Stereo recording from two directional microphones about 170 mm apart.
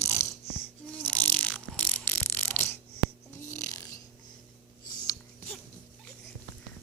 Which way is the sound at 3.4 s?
15° left (ahead or behind).